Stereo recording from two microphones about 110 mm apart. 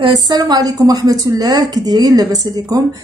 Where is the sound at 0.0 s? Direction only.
40° right (ahead or behind).